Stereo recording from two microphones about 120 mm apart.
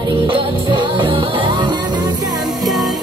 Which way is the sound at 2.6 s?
Centre (ahead or behind).